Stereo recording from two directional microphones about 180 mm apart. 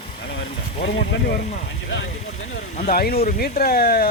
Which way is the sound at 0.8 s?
75° left (ahead or behind).